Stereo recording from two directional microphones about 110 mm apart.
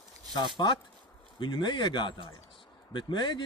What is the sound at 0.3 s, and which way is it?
Speech, 45° left (ahead or behind).